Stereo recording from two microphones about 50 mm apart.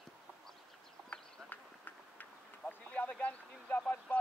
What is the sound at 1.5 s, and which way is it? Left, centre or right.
Run, left.